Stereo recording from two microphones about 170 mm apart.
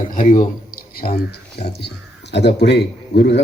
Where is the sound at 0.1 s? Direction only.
50° left (ahead or behind).